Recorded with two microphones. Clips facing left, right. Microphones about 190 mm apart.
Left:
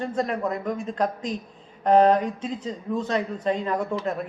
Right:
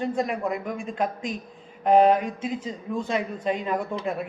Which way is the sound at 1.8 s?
15° right (ahead or behind).